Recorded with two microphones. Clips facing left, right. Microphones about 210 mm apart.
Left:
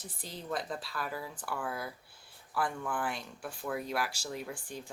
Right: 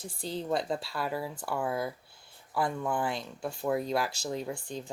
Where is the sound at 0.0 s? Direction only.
30° right (ahead or behind).